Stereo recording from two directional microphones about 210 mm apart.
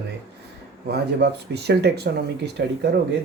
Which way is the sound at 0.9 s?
50° right (ahead or behind).